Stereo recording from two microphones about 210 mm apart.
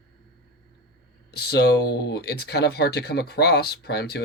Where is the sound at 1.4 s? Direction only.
50° left (ahead or behind).